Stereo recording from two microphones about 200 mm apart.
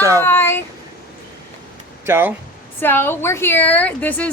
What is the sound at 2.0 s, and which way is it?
Speech, 10° right (ahead or behind).